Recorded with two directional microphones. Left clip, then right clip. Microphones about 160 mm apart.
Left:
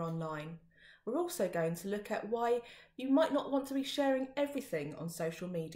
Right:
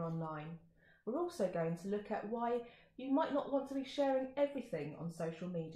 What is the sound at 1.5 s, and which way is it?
A woman's voice, 20° left (ahead or behind).